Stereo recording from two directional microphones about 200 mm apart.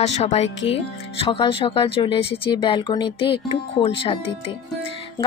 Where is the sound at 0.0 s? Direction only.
30° left (ahead or behind).